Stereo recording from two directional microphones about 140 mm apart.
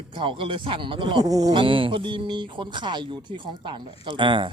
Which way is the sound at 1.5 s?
40° right (ahead or behind).